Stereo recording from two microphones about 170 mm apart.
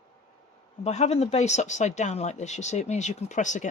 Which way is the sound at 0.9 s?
40° left (ahead or behind).